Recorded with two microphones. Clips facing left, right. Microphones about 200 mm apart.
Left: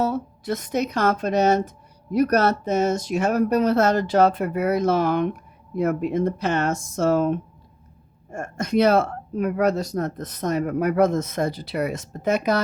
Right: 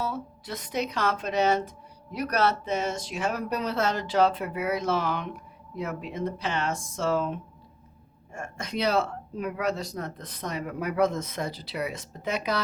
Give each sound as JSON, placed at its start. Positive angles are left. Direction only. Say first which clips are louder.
{"t": 0.0, "sound": "speech", "louder": "left 8 dB", "side_deg": 45}